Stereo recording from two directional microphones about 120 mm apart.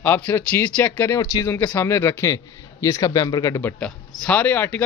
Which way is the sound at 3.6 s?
15° left (ahead or behind).